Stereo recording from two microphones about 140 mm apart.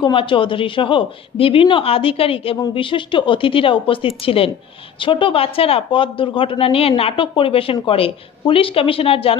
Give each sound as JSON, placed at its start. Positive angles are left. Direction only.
{"t": 0.0, "sound": "a woman's voice", "side_deg": 35}